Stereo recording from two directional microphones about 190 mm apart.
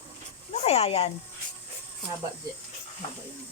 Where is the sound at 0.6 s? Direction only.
35° left (ahead or behind).